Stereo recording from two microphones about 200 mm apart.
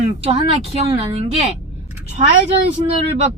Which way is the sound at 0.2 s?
30° right (ahead or behind).